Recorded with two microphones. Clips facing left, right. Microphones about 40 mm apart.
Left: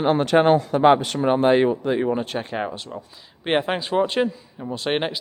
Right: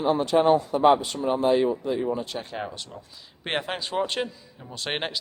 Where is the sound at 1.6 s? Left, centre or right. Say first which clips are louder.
Left 4 dB; left.